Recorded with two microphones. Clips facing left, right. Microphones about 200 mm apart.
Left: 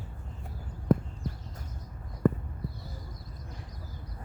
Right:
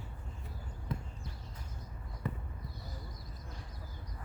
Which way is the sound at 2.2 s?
50° left (ahead or behind).